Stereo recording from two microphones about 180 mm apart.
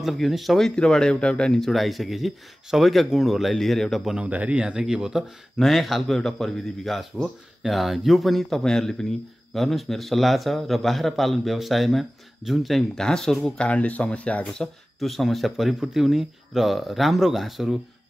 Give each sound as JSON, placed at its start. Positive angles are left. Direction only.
{"t": 0.0, "sound": "speech", "side_deg": 0}